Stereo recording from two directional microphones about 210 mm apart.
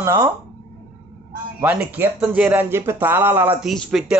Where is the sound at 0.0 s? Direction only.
15° right (ahead or behind).